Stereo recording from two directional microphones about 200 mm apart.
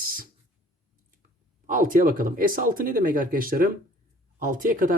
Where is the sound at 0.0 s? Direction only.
45° right (ahead or behind).